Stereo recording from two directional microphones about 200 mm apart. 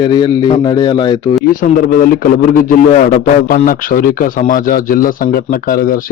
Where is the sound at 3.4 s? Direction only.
45° left (ahead or behind).